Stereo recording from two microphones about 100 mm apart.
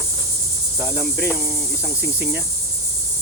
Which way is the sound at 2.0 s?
20° right (ahead or behind).